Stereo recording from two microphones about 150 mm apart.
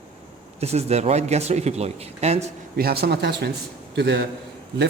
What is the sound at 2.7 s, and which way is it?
Speech, 90° right.